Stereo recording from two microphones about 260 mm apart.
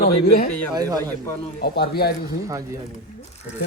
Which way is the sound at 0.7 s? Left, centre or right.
Centre.